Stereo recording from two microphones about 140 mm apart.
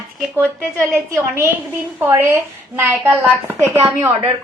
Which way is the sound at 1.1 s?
20° right (ahead or behind).